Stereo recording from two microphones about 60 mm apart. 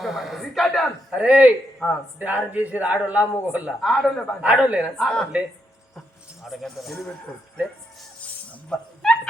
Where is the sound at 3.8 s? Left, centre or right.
Centre.